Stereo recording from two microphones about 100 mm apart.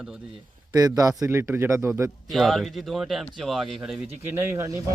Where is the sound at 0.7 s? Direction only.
35° right (ahead or behind).